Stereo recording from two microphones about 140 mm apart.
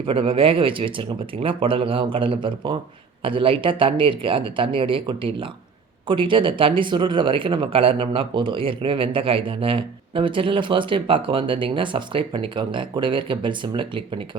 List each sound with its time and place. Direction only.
0.0 s speech: 40° right (ahead or behind)